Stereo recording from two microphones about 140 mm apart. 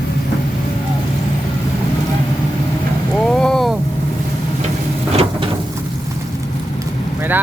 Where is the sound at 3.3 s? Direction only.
5° left (ahead or behind).